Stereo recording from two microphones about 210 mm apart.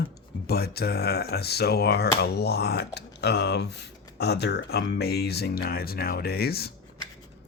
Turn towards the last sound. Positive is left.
turn(degrees=50)  # may be behind; listen again after turning